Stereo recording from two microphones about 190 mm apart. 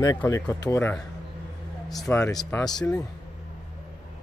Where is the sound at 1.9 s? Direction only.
Centre (ahead or behind).